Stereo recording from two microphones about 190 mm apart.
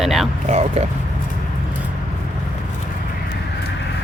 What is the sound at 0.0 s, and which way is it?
Speech, centre (ahead or behind).